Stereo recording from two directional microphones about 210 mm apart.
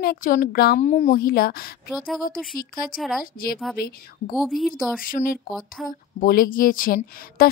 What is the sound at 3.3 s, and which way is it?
Speech, 45° left (ahead or behind).